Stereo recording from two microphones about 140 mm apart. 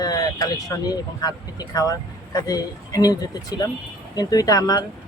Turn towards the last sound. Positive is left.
turn(degrees=25)  # may be behind; listen again after turning